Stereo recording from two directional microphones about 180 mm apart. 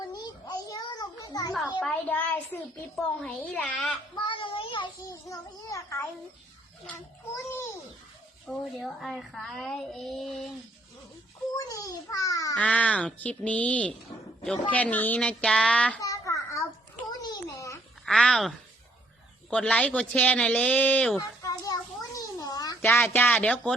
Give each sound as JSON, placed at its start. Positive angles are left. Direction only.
{"t": 0.1, "sound": "a sound", "side_deg": 20}
{"t": 1.8, "sound": "a woman's voice", "side_deg": 5}
{"t": 4.1, "sound": "child singing", "side_deg": 25}
{"t": 5.3, "sound": "a woman's voice", "side_deg": 15}
{"t": 8.4, "sound": "a woman's voice", "side_deg": 0}
{"t": 11.5, "sound": "a child's voice", "side_deg": 20}
{"t": 12.5, "sound": "a woman's voice", "side_deg": 10}
{"t": 16.0, "sound": "a sound", "side_deg": 20}
{"t": 18.0, "sound": "a woman's voice", "side_deg": 5}
{"t": 21.2, "sound": "a sound", "side_deg": 20}